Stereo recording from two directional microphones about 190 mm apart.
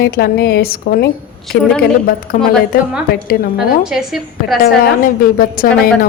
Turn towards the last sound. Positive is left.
turn(degrees=50)  # may be behind; listen again after turning